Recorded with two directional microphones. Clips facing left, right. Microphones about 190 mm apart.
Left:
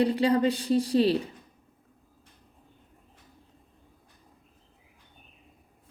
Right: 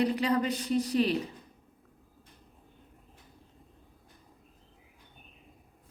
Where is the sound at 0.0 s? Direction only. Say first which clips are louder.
Left 4 dB; 30° left (ahead or behind).